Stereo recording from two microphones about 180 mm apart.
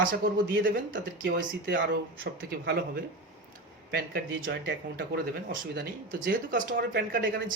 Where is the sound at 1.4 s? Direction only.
90° right.